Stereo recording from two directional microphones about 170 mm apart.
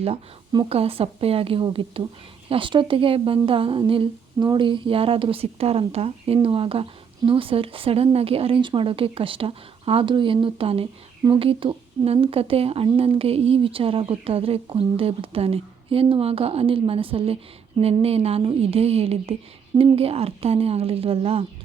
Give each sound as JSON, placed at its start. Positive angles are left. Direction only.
{"t": 0.5, "sound": "speech", "side_deg": -35}